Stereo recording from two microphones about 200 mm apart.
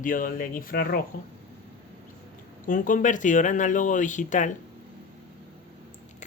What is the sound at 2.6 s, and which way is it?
Speech, 40° left (ahead or behind).